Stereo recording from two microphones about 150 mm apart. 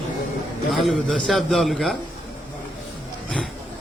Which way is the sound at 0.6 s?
Centre (ahead or behind).